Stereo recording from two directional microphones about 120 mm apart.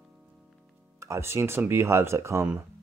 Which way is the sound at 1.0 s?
25° right (ahead or behind).